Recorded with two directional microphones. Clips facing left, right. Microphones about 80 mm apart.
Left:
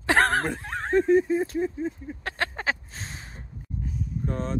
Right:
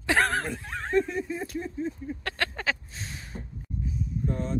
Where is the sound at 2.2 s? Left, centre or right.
Left.